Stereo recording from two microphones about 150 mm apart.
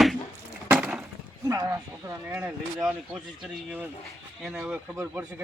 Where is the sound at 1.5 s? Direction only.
20° right (ahead or behind).